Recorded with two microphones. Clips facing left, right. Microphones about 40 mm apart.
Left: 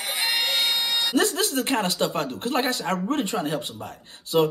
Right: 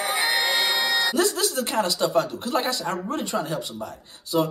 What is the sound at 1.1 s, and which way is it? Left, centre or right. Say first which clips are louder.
Music: even; left.